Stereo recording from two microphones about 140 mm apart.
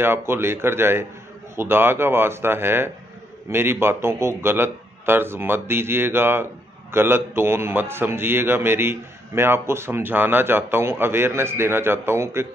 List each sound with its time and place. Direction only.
0.0 s a man's voice: 15° right (ahead or behind)